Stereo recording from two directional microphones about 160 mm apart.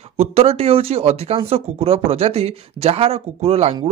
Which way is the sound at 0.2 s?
40° right (ahead or behind).